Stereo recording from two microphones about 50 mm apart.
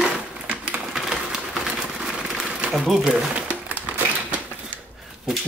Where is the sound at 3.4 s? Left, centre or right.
Right.